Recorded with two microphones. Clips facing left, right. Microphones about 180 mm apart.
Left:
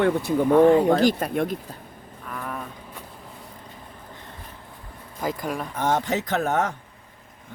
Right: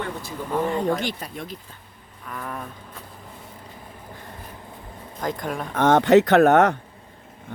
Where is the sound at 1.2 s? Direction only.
55° left (ahead or behind).